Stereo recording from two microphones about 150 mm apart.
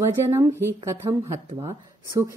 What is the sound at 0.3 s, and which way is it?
A woman's voice, 20° right (ahead or behind).